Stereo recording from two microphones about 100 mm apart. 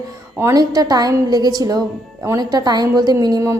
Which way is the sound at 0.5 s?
40° right (ahead or behind).